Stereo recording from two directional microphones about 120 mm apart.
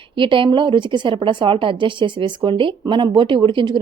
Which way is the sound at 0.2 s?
45° right (ahead or behind).